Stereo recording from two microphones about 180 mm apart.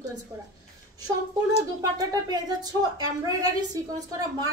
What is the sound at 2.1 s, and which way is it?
Speech, 20° right (ahead or behind).